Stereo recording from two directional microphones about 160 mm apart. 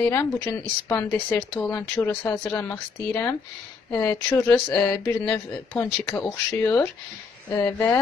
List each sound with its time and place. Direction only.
0.0 s speech: 15° left (ahead or behind)